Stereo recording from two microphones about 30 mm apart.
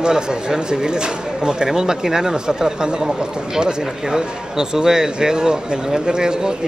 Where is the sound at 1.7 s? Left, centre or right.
Centre.